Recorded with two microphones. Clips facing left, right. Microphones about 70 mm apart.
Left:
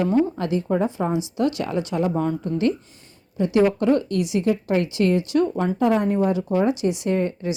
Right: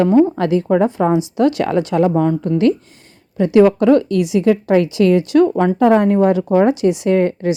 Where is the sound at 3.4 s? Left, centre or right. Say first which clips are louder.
Right 8 dB; right.